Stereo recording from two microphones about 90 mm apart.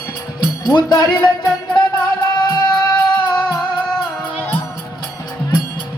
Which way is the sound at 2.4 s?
50° left (ahead or behind).